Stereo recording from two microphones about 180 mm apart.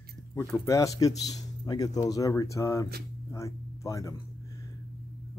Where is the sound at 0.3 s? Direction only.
15° left (ahead or behind).